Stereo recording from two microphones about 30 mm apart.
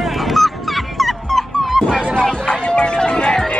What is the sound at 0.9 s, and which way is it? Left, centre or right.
Dog, centre.